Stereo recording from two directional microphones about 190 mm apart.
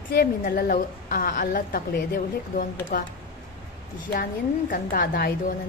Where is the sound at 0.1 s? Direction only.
50° left (ahead or behind).